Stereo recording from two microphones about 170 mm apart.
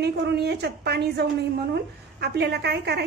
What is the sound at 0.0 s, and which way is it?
A woman's voice, 75° right (ahead or behind).